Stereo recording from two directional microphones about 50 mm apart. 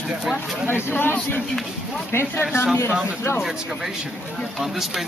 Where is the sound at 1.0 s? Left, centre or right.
Left.